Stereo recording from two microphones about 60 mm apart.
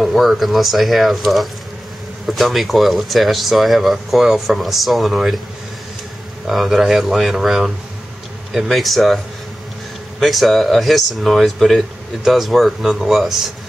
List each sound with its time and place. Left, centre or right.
0.0 s speech: centre
6.4 s speech: centre
10.2 s speech: centre